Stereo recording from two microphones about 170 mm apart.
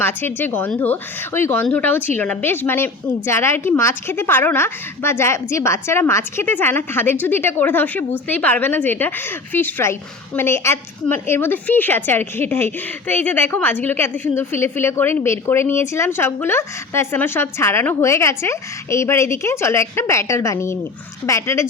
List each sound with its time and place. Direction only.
0.0 s a woman's voice: 10° left (ahead or behind)